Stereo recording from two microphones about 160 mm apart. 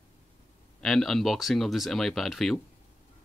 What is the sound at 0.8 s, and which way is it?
Speech, centre (ahead or behind).